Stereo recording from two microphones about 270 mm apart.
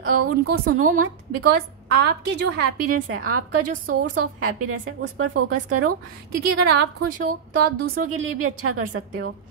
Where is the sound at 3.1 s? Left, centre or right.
Right.